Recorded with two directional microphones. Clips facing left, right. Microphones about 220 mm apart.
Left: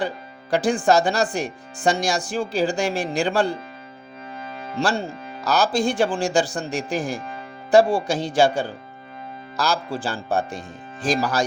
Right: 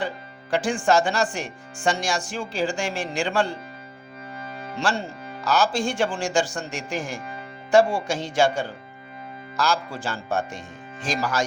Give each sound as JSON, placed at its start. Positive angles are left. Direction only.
{"t": 0.5, "sound": "speech", "side_deg": 35}
{"t": 4.8, "sound": "speech", "side_deg": 35}